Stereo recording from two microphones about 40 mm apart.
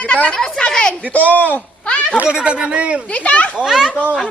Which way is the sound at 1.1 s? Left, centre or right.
Left.